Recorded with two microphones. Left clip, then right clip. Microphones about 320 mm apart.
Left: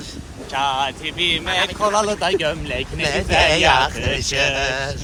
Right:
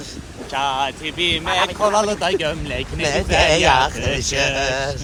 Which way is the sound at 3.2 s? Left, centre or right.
Right.